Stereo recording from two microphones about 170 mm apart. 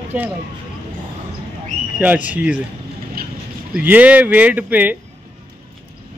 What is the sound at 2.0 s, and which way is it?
Speech, 10° right (ahead or behind).